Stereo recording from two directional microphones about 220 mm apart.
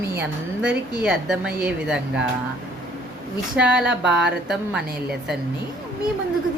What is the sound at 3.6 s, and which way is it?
Speech, 5° right (ahead or behind).